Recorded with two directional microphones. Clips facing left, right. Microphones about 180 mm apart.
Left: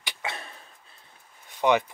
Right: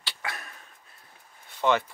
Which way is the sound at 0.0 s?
20° left (ahead or behind).